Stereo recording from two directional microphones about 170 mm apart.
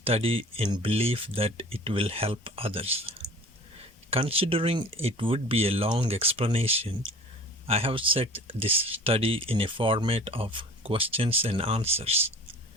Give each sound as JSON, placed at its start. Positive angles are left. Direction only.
{"t": 0.0, "sound": "speech", "side_deg": -35}